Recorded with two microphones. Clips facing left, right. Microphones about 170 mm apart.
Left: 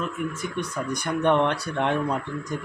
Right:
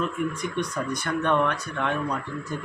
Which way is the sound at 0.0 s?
5° left (ahead or behind).